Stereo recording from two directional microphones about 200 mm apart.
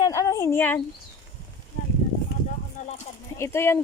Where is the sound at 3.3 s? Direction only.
15° left (ahead or behind).